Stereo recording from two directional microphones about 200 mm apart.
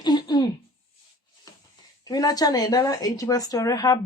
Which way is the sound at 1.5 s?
15° left (ahead or behind).